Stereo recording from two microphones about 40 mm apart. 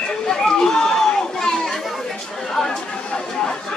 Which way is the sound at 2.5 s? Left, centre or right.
Centre.